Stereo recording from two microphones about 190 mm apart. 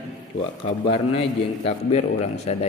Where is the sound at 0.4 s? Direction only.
30° left (ahead or behind).